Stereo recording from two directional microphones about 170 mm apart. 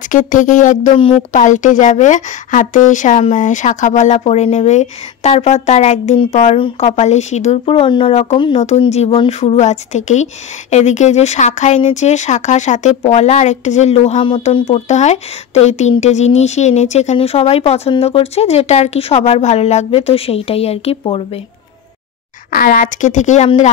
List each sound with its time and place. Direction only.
0.1 s a woman's voice: 50° left (ahead or behind)
0.9 s speech: 35° left (ahead or behind)
1.3 s a woman's voice: 50° left (ahead or behind)
8.4 s speech: 30° left (ahead or behind)
22.5 s a woman's voice: 55° left (ahead or behind)